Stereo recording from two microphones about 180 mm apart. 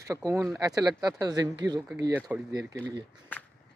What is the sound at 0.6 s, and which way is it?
Speech, 20° right (ahead or behind).